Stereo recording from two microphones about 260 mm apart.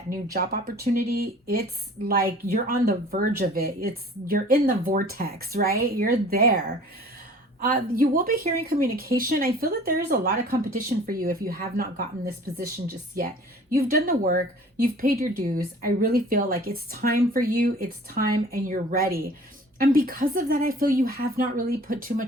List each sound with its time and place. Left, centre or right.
0.3 s speech: right
7.6 s speech: right